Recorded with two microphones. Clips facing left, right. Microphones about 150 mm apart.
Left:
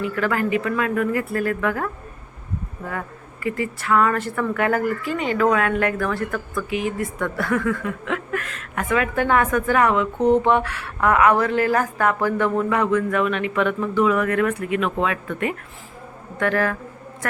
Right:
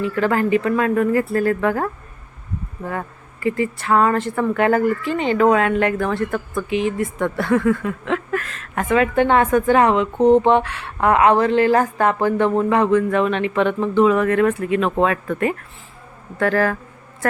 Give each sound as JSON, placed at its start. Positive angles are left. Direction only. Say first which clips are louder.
{"t": 0.0, "sound": "speech", "louder": "right 3 dB", "side_deg": -30}
{"t": 3.4, "sound": "speech", "louder": "right 4 dB", "side_deg": -25}